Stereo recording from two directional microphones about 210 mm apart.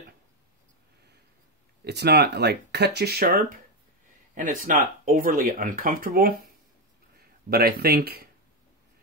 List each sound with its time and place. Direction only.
1.9 s speech: 50° right (ahead or behind)